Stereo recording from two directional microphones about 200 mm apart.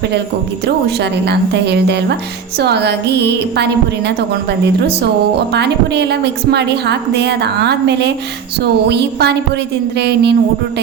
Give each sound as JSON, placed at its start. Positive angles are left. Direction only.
{"t": 0.9, "sound": "a woman's voice", "side_deg": -55}
{"t": 5.5, "sound": "a woman's voice", "side_deg": -55}